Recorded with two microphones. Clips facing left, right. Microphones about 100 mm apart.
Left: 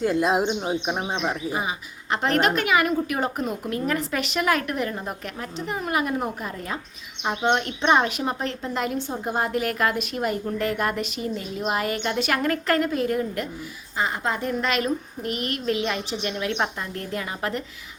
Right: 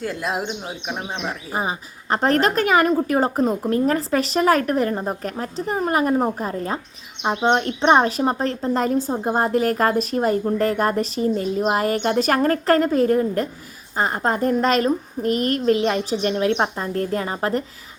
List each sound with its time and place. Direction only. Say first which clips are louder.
0.0 s speech: left 4 dB; 20° left (ahead or behind)
1.5 s speech: right 2 dB; 35° right (ahead or behind)